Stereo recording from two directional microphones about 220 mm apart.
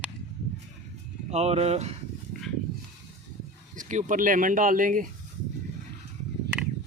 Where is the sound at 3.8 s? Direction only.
35° right (ahead or behind).